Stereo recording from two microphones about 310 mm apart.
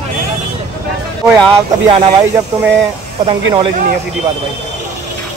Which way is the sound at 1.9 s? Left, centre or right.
Centre.